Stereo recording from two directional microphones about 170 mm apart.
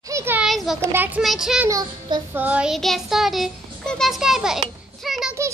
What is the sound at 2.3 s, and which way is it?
Child singing, 10° right (ahead or behind).